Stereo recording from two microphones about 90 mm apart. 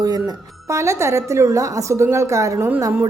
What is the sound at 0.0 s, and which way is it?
A woman's voice, 45° right (ahead or behind).